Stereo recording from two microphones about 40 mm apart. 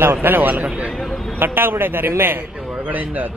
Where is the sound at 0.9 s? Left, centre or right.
Centre.